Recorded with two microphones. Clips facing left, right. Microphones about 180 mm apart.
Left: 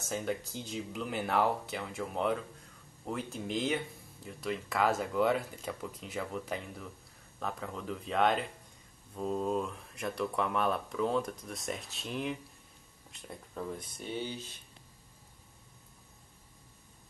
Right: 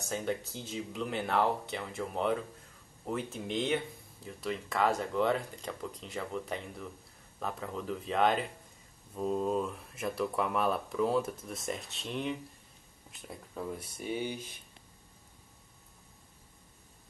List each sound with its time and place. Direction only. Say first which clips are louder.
0.0 s speech: right 1 dB; centre (ahead or behind)